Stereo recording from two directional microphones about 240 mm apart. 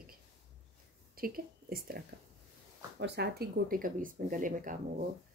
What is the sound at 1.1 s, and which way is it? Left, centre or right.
Speech, right.